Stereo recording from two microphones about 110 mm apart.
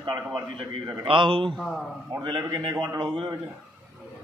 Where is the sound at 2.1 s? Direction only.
45° right (ahead or behind).